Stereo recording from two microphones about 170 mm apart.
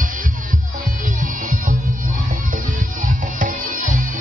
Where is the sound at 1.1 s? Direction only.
50° right (ahead or behind).